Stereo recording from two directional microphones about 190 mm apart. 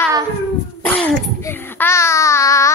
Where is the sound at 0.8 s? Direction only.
10° left (ahead or behind).